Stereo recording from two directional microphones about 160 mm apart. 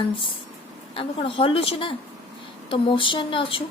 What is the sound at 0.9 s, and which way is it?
A woman's voice, 35° left (ahead or behind).